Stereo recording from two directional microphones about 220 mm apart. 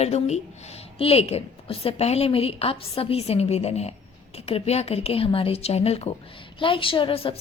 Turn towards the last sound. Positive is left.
turn(degrees=25)  # may be behind; listen again after turning